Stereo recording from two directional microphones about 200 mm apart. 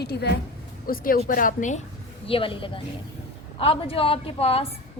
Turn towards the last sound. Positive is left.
turn(degrees=30)  # may be behind; listen again after turning